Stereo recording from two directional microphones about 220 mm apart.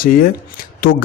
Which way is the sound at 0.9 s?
65° left (ahead or behind).